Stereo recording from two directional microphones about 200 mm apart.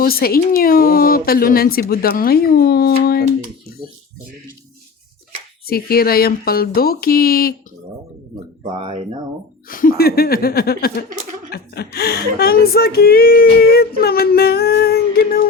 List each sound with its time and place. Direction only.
0.0 s speech: 50° left (ahead or behind)
5.6 s speech: 50° left (ahead or behind)
8.8 s speech: 30° right (ahead or behind)
9.6 s speech: 45° left (ahead or behind)